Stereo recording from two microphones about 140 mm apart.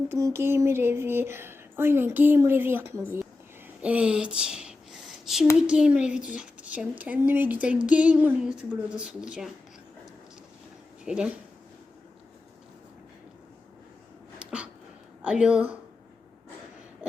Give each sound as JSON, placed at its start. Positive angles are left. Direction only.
{"t": 0.1, "sound": "speech", "side_deg": -20}
{"t": 3.8, "sound": "a sound", "side_deg": -10}
{"t": 5.5, "sound": "speech", "side_deg": -5}
{"t": 11.0, "sound": "speech", "side_deg": -5}
{"t": 14.3, "sound": "a sound", "side_deg": -10}
{"t": 15.2, "sound": "speech", "side_deg": -10}